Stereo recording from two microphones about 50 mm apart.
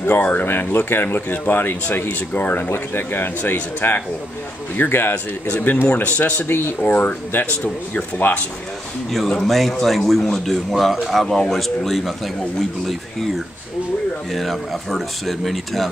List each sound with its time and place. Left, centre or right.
0.0 s speech: left
6.4 s speech: left
6.8 s speech: left
9.1 s speech: centre
14.3 s speech: centre